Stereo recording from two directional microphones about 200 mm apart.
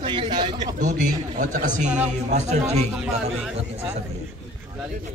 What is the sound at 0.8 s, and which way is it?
A man's voice, 40° right (ahead or behind).